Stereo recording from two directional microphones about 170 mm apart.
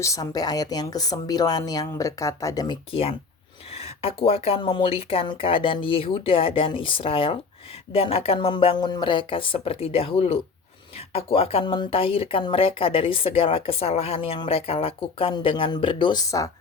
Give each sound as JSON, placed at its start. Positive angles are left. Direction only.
{"t": 0.0, "sound": "speech", "side_deg": 20}
{"t": 2.9, "sound": "speech", "side_deg": 35}